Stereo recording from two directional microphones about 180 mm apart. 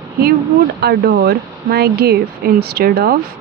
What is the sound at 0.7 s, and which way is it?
Speech, 60° right (ahead or behind).